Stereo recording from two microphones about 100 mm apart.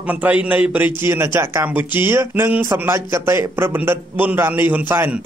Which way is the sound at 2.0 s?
25° right (ahead or behind).